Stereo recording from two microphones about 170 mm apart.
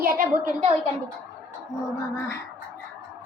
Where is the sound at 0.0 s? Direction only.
55° right (ahead or behind).